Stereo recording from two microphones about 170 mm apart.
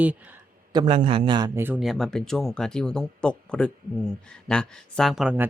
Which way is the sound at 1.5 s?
10° right (ahead or behind).